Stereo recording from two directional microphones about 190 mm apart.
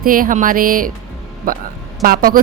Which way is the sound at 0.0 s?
45° right (ahead or behind).